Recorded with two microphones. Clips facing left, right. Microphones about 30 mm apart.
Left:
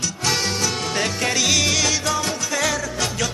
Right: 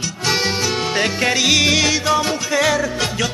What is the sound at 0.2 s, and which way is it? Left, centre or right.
Music, centre.